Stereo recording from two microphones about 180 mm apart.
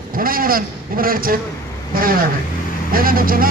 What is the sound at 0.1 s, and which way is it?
A man's voice, 55° right (ahead or behind).